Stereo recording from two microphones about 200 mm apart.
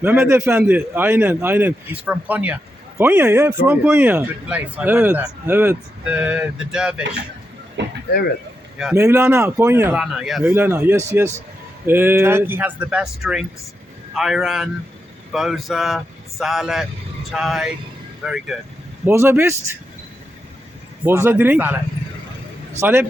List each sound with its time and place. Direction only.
0.0 s speech: 10° right (ahead or behind)
7.8 s speech: 60° right (ahead or behind)
8.8 s speech: 10° right (ahead or behind)
21.0 s speech: 10° right (ahead or behind)
22.8 s speech: 10° right (ahead or behind)